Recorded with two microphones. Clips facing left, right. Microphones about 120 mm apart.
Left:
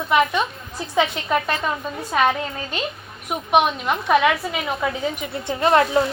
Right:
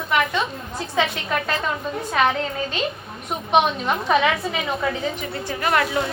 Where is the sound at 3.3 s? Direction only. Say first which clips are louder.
Left 1 dB; 5° left (ahead or behind).